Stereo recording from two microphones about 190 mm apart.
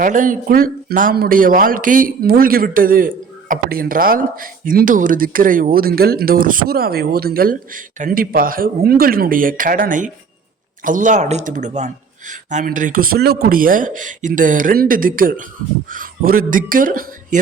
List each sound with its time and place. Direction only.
0.0 s speech: 45° right (ahead or behind)